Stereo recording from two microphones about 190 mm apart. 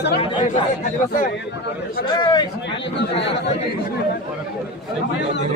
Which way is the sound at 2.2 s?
25° left (ahead or behind).